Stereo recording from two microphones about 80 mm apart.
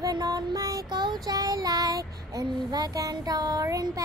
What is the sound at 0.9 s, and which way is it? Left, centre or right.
Child singing, right.